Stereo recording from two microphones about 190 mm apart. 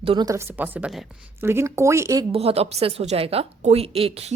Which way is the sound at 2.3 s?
30° right (ahead or behind).